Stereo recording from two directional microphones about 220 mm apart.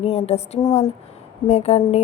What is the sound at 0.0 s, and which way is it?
A woman's voice, 30° left (ahead or behind).